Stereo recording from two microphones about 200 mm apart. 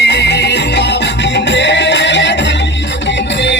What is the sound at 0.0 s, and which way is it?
Music, 60° left (ahead or behind).